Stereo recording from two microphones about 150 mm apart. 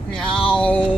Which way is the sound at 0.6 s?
10° left (ahead or behind).